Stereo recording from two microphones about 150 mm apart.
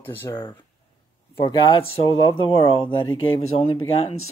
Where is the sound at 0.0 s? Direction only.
15° left (ahead or behind).